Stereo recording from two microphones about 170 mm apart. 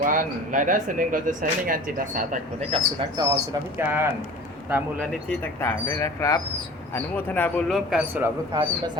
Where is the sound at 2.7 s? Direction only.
25° right (ahead or behind).